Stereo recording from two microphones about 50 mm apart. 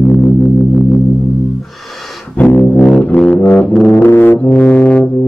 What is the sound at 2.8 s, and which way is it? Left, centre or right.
Music, left.